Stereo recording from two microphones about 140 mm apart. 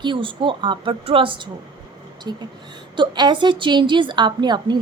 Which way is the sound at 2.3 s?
25° right (ahead or behind).